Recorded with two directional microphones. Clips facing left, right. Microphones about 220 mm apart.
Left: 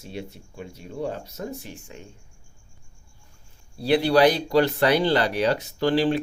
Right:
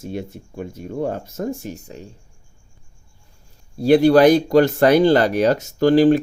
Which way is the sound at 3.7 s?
45° right (ahead or behind).